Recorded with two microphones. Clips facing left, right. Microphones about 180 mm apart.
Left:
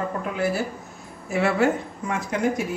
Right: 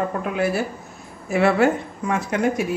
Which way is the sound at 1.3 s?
70° right (ahead or behind).